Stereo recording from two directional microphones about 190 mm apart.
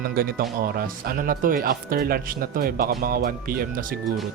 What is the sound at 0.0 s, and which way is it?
Speech, 50° right (ahead or behind).